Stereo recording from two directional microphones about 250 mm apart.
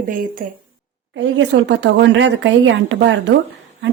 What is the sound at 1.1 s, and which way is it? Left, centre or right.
A woman's voice, right.